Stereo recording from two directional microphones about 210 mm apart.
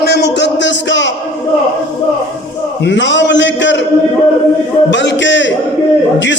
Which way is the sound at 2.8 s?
60° left (ahead or behind).